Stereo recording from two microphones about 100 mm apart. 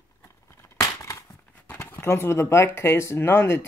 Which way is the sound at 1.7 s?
25° left (ahead or behind).